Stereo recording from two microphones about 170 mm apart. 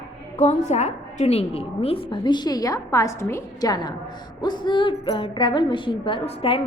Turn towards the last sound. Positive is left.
turn(degrees=35)  # may be behind; listen again after turning